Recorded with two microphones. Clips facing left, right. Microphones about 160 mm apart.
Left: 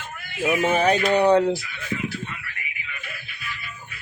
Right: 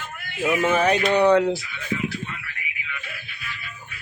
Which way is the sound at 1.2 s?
30° left (ahead or behind).